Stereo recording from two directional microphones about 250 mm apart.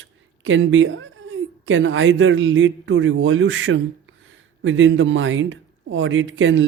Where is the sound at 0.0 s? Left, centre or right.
Right.